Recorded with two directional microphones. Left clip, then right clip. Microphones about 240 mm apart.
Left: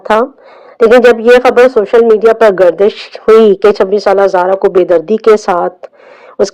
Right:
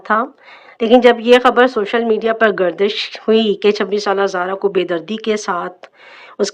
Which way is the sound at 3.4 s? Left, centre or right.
Right.